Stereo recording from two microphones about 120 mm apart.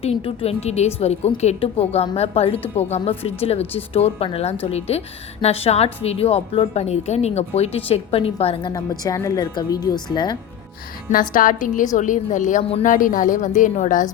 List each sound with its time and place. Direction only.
0.0 s a woman's voice: 55° left (ahead or behind)
7.9 s a woman's voice: 55° left (ahead or behind)
8.7 s speech: 30° left (ahead or behind)
11.1 s a woman's voice: 85° left